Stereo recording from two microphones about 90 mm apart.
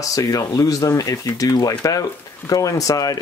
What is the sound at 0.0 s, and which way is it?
Speech, 40° left (ahead or behind).